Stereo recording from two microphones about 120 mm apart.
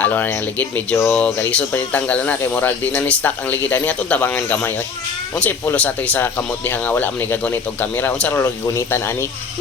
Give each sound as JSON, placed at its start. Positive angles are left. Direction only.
{"t": 0.0, "sound": "speech", "side_deg": 15}